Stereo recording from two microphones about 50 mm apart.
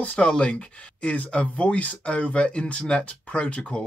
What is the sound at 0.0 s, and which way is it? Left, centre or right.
Speech, left.